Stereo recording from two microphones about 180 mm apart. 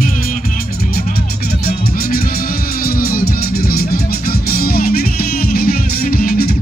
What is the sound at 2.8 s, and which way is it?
Music, 55° left (ahead or behind).